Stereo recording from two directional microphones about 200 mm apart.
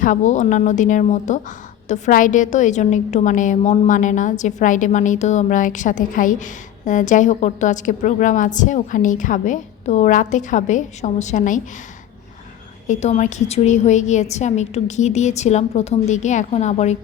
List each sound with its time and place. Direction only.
0.0 s a woman's voice: 40° left (ahead or behind)
12.9 s a woman's voice: 35° left (ahead or behind)